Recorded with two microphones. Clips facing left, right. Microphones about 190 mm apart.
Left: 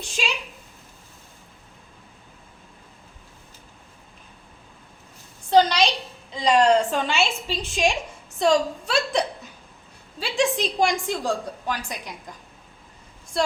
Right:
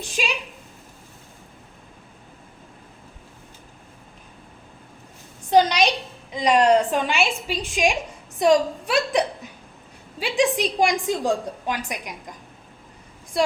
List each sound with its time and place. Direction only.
5.5 s a woman's voice: 15° right (ahead or behind)
13.3 s a woman's voice: 15° right (ahead or behind)